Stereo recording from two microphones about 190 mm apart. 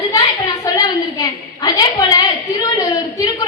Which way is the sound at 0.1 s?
20° left (ahead or behind).